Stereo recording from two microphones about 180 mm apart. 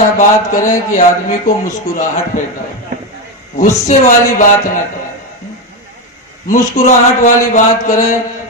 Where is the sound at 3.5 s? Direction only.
45° left (ahead or behind).